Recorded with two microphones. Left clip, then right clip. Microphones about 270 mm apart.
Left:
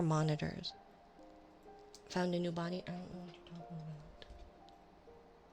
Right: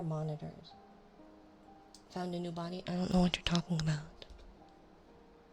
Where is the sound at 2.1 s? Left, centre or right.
Left.